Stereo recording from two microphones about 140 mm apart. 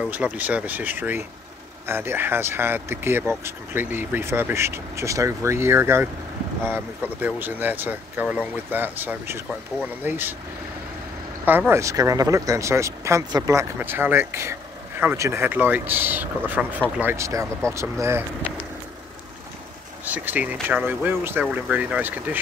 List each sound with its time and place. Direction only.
0.0 s speech: 10° right (ahead or behind)
11.4 s speech: 15° right (ahead or behind)
20.1 s speech: 10° right (ahead or behind)